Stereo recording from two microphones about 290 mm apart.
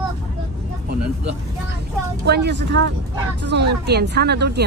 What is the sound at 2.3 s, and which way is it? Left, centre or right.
Speech, right.